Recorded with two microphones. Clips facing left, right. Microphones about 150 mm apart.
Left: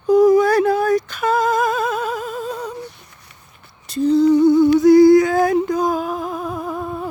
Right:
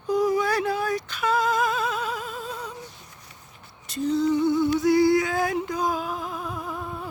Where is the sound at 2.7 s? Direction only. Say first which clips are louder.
Left 8 dB; 65° left (ahead or behind).